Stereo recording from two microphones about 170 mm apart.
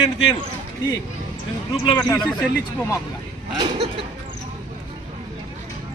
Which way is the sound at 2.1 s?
5° left (ahead or behind).